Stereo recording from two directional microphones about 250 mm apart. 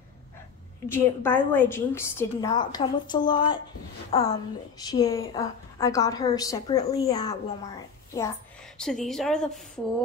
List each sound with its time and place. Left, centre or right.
0.8 s a woman's voice: centre
8.7 s a woman's voice: centre